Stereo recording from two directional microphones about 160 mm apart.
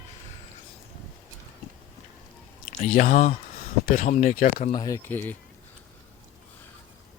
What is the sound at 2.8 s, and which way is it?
Speech, 50° left (ahead or behind).